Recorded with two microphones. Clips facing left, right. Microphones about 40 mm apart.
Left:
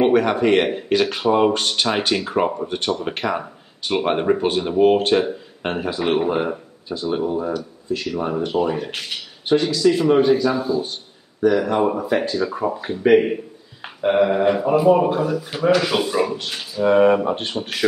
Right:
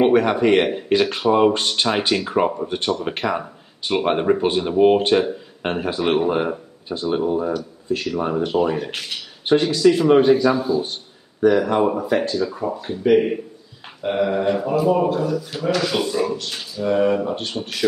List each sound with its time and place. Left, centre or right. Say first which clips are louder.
0.0 s speech: right 1 dB; centre
12.5 s speech: left 2 dB; left
12.9 s speech: left 1 dB; centre
16.9 s speech: left 3 dB; left